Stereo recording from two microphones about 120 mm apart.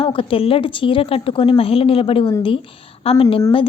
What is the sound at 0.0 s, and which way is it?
A woman's voice, 50° left (ahead or behind).